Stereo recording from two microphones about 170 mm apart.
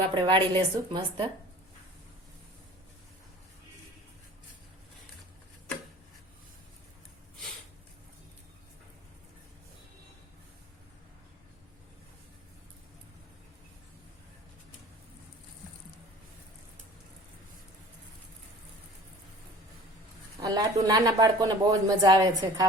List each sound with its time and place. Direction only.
0.1 s speech: 30° right (ahead or behind)
20.4 s speech: 25° right (ahead or behind)